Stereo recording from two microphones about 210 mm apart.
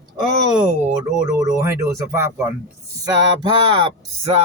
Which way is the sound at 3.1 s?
20° right (ahead or behind).